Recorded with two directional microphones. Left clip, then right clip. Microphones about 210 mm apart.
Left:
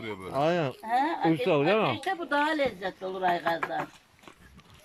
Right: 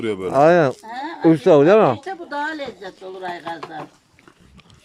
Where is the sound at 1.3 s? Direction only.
30° right (ahead or behind).